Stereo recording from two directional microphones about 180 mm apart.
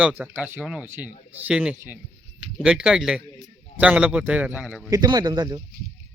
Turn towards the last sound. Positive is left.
turn(degrees=-20)  # may be behind; listen again after turning